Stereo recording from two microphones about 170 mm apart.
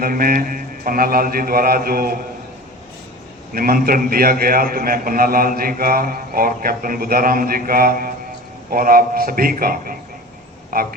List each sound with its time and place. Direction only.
0.0 s a man's voice: 55° right (ahead or behind)
3.5 s a man's voice: 60° right (ahead or behind)